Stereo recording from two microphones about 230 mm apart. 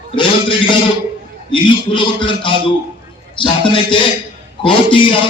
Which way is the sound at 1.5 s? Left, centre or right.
Left.